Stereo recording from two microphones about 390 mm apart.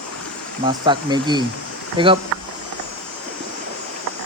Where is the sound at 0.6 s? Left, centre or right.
Centre.